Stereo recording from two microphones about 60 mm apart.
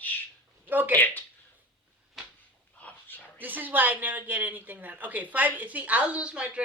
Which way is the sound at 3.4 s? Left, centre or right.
Right.